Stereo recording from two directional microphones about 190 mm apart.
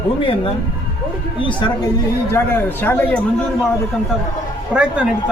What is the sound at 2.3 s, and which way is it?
Speech, 10° left (ahead or behind).